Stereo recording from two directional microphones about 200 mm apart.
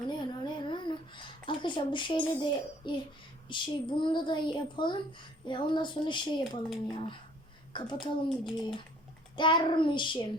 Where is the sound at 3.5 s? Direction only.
25° left (ahead or behind).